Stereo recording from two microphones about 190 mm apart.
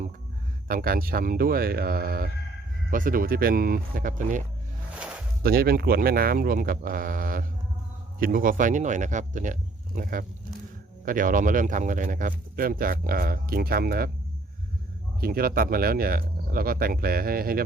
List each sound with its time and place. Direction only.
0.7 s speech: 50° right (ahead or behind)
15.2 s speech: 50° right (ahead or behind)